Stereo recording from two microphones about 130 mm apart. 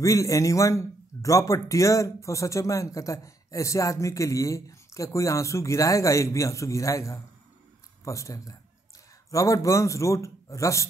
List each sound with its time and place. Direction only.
0.0 s a man's voice: 25° left (ahead or behind)